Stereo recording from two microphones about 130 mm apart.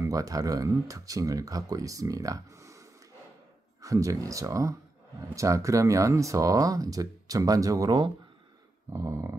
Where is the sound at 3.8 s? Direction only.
25° right (ahead or behind).